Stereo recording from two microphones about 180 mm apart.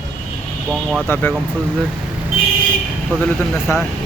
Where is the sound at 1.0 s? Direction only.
10° left (ahead or behind).